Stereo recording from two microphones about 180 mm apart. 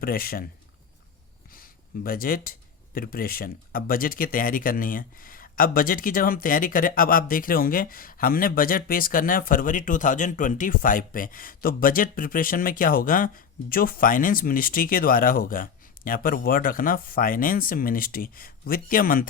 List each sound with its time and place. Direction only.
0.0 s speech: 55° left (ahead or behind)
1.5 s speech: 55° left (ahead or behind)